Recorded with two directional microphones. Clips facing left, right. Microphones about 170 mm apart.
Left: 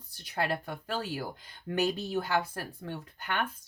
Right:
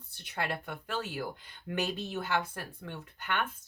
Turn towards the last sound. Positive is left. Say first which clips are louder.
# left 1 dB
turn(degrees=35)  # may be behind; listen again after turning